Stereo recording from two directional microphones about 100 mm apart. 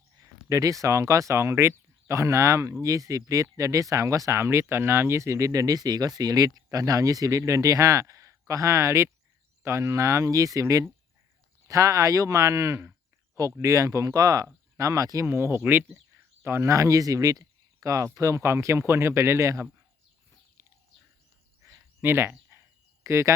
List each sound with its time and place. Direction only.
0.2 s speech: 30° right (ahead or behind)
15.3 s speech: 25° right (ahead or behind)
21.6 s a sound: 25° right (ahead or behind)
23.0 s speech: 30° right (ahead or behind)